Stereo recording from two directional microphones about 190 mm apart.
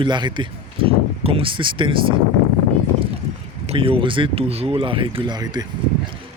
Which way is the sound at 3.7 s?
30° right (ahead or behind).